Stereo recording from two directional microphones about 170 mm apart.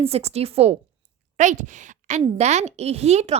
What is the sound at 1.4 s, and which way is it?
A woman's voice, 45° right (ahead or behind).